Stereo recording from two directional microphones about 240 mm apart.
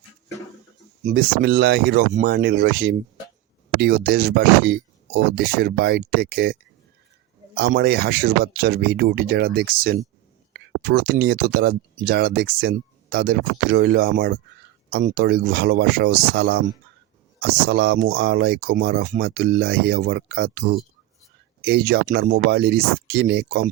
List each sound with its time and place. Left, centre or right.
1.0 s speech: right